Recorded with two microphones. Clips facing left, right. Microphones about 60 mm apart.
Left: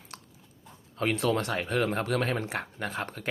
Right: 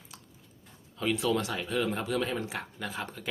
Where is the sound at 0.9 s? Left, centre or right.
Left.